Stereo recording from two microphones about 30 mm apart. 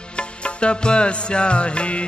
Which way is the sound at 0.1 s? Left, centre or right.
Left.